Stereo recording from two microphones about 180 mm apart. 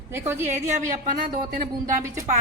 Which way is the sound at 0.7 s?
50° right (ahead or behind).